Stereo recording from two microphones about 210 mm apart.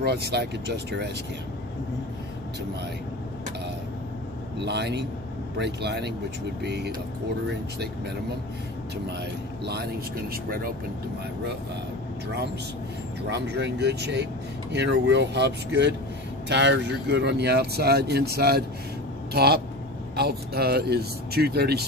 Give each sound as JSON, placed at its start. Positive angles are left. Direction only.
{"t": 0.0, "sound": "speech", "side_deg": -50}
{"t": 4.6, "sound": "speech", "side_deg": -55}
{"t": 9.7, "sound": "speech", "side_deg": -50}
{"t": 13.3, "sound": "speech", "side_deg": -55}